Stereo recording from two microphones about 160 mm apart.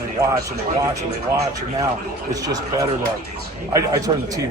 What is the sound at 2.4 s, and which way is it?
Speech, 20° right (ahead or behind).